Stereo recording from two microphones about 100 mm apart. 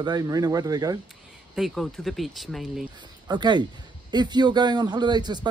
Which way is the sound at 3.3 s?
45° right (ahead or behind).